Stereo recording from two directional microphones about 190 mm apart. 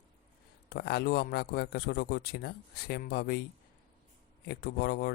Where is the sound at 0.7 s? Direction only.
60° left (ahead or behind).